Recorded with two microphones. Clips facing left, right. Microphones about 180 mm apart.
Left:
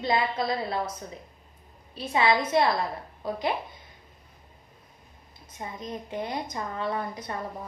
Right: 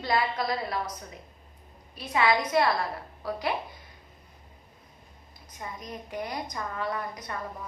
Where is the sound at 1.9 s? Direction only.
25° left (ahead or behind).